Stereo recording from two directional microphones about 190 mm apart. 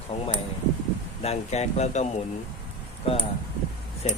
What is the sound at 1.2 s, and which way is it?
Speech, 35° left (ahead or behind).